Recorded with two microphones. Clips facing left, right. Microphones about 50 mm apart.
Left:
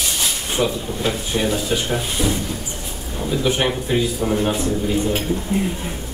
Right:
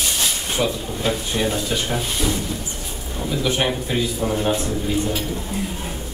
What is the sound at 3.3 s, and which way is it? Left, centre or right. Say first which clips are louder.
Speech: left 2 dB; left.